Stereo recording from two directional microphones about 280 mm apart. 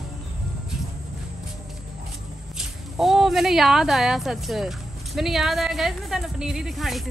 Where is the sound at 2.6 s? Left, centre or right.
Centre.